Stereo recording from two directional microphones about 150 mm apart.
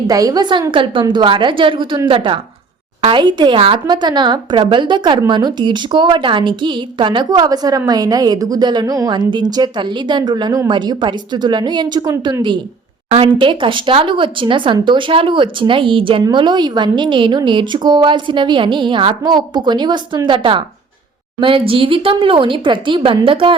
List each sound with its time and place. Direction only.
0.1 s a woman's voice: 25° right (ahead or behind)